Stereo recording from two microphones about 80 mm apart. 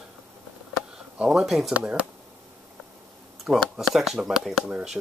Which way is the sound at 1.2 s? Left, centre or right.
Centre.